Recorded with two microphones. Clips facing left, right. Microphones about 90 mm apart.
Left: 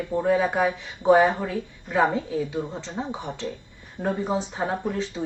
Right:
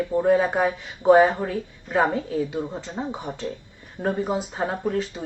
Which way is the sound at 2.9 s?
10° right (ahead or behind).